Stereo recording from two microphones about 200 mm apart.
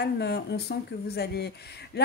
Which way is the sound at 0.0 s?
55° left (ahead or behind).